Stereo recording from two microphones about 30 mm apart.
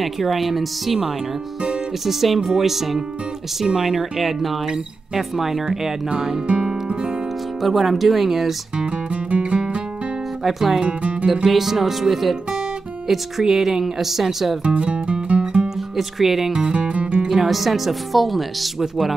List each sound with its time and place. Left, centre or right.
0.0 s speech: centre
6.9 s music: right
7.6 s speech: centre
8.7 s music: right
10.4 s speech: centre
10.8 s speech: right
11.4 s speech: centre
14.6 s music: right
16.0 s speech: centre
16.5 s music: right
16.8 s music: right
17.3 s speech: centre